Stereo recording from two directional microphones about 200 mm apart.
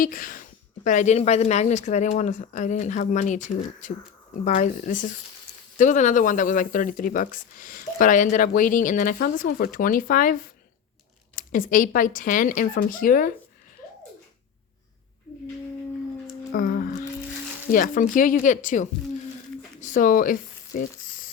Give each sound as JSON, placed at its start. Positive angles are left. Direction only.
{"t": 0.0, "sound": "speech", "side_deg": 40}
{"t": 11.3, "sound": "speech", "side_deg": 45}
{"t": 16.5, "sound": "music", "side_deg": 45}
{"t": 17.7, "sound": "speech", "side_deg": 45}
{"t": 19.8, "sound": "a sound", "side_deg": 40}